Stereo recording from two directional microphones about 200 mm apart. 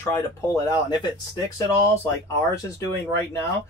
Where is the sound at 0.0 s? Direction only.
15° left (ahead or behind).